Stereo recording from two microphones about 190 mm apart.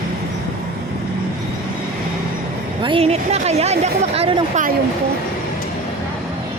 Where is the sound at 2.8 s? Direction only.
30° right (ahead or behind).